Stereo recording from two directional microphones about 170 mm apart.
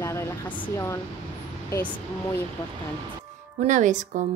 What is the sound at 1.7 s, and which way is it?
Speech, 15° left (ahead or behind).